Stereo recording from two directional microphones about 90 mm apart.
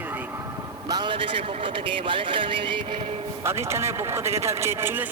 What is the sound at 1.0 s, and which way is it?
Speech, 75° right (ahead or behind).